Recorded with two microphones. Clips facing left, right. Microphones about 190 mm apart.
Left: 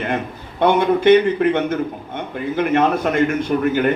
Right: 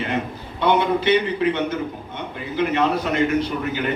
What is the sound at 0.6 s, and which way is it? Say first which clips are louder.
A man's voice: left 4 dB; 50° left (ahead or behind).